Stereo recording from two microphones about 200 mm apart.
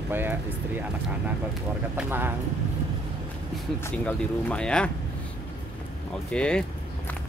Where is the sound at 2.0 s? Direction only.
10° right (ahead or behind).